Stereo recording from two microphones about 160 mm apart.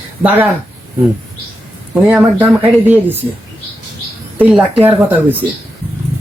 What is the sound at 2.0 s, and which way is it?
Speech, 5° right (ahead or behind).